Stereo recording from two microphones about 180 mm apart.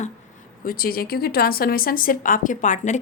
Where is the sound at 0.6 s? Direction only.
55° left (ahead or behind).